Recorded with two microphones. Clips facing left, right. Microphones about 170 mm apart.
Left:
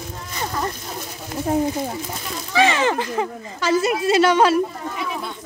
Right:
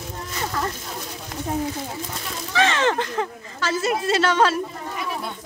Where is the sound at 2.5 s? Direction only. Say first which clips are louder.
Left 2 dB; 10° left (ahead or behind).